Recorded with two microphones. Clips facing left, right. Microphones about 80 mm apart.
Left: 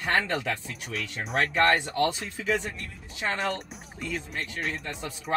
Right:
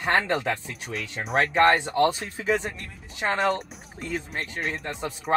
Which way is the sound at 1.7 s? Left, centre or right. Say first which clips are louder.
Right 4 dB; right.